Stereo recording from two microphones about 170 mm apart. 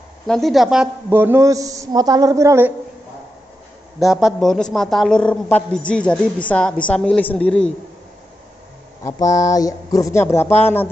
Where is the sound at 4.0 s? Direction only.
Centre (ahead or behind).